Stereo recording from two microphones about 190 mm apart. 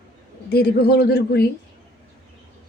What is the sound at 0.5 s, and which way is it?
Speech, 55° left (ahead or behind).